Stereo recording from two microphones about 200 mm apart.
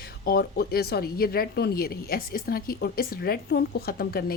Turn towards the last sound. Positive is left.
turn(degrees=50)  # may be behind; listen again after turning